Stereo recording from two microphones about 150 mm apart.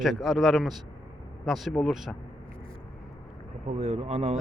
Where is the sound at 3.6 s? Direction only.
45° right (ahead or behind).